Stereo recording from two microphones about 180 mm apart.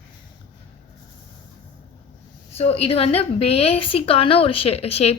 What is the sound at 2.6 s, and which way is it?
Speech, 35° left (ahead or behind).